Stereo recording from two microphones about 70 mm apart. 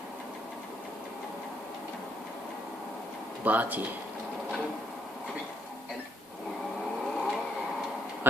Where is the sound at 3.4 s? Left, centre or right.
Right.